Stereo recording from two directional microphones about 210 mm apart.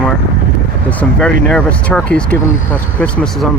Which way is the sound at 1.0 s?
5° left (ahead or behind).